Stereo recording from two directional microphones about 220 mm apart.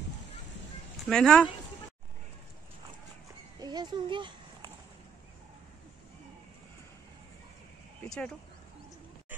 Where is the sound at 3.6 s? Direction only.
20° right (ahead or behind).